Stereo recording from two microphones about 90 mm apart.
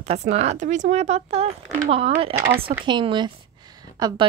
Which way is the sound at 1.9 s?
90° right.